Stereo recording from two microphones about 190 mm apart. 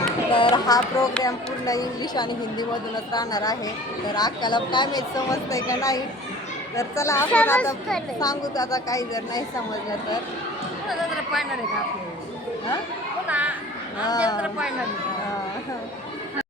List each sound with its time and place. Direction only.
0.3 s music: 25° left (ahead or behind)
1.2 s speech: 20° left (ahead or behind)
8.2 s speech: 20° left (ahead or behind)
13.2 s children playing: 10° right (ahead or behind)
14.0 s speech: 20° left (ahead or behind)